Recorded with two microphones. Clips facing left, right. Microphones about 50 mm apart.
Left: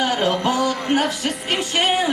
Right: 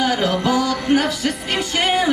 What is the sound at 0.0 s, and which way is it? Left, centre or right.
Music, left.